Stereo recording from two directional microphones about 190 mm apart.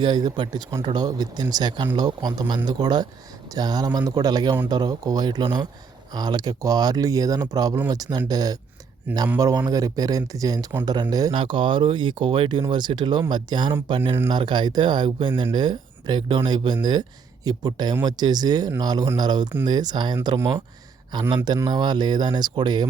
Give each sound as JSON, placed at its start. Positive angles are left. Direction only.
{"t": 0.0, "sound": "speech", "side_deg": -20}
{"t": 9.1, "sound": "speech", "side_deg": -10}
{"t": 9.4, "sound": "speech", "side_deg": -20}